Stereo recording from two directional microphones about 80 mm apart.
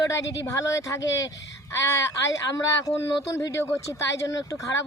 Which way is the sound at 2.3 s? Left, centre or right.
Left.